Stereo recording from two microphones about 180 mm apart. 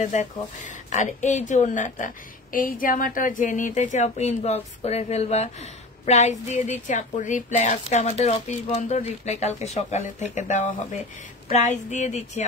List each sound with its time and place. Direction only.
0.0 s speech: 40° left (ahead or behind)